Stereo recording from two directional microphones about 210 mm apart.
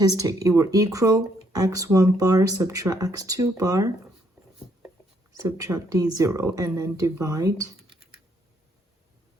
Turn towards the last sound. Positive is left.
turn(degrees=-15)  # may be behind; listen again after turning